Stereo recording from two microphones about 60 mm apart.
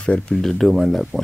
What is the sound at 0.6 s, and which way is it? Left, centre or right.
Speech, centre.